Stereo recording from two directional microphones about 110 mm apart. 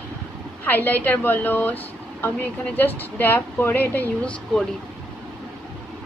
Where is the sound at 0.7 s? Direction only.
15° left (ahead or behind).